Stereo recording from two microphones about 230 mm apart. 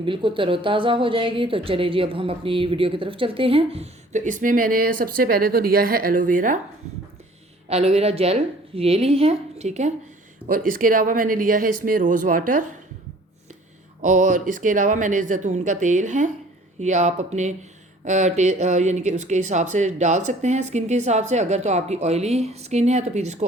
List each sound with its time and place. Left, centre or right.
0.0 s speech: right
7.7 s speech: right
14.0 s speech: right